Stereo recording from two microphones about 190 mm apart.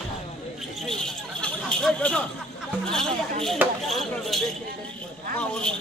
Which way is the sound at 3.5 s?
Centre (ahead or behind).